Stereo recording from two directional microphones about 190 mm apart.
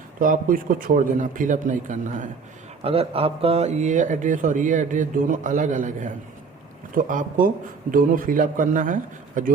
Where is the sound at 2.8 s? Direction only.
30° right (ahead or behind).